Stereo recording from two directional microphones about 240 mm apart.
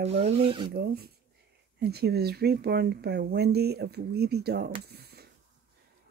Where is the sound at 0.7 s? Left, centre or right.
Right.